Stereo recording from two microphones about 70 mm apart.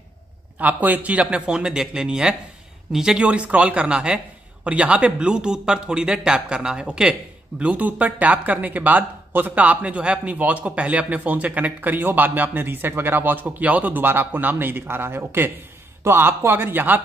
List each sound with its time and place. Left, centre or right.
0.6 s a man's voice: right